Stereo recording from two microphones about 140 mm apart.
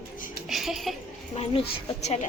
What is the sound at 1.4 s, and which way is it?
Speech, 45° left (ahead or behind).